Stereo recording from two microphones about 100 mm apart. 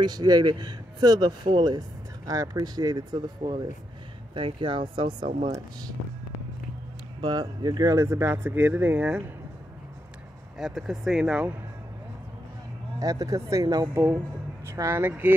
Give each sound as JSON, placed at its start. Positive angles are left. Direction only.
{"t": 0.0, "sound": "speech", "side_deg": -45}
{"t": 7.2, "sound": "speech", "side_deg": -45}
{"t": 8.0, "sound": "speech", "side_deg": -25}
{"t": 10.6, "sound": "speech", "side_deg": -5}
{"t": 13.0, "sound": "speech", "side_deg": -35}
{"t": 14.7, "sound": "speech", "side_deg": -25}